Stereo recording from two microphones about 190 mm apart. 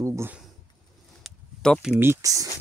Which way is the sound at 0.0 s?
15° right (ahead or behind).